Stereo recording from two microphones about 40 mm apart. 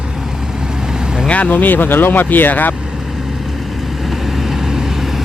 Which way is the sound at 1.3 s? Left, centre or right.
Left.